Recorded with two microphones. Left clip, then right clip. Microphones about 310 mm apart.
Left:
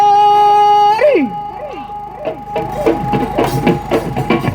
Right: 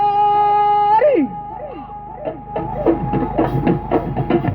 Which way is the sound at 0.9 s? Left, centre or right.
Left.